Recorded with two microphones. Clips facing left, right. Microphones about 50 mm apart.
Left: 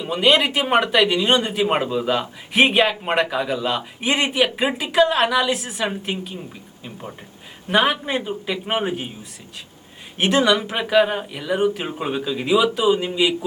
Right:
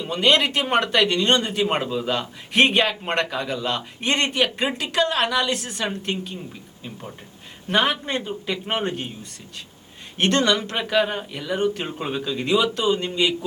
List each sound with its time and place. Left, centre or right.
0.0 s a man's voice: centre
10.2 s speech: centre